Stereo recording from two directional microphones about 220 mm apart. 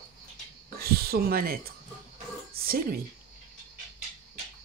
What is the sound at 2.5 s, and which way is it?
Music, 40° right (ahead or behind).